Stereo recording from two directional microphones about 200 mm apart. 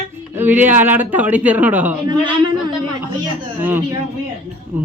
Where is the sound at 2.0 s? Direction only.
25° right (ahead or behind).